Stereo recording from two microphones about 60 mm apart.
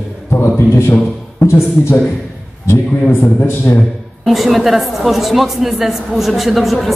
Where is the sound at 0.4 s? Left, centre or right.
Left.